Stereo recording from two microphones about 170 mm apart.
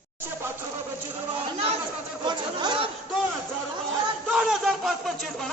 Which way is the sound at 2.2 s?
25° right (ahead or behind).